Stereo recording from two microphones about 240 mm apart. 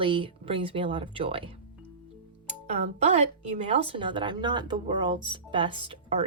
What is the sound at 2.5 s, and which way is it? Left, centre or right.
Speech, right.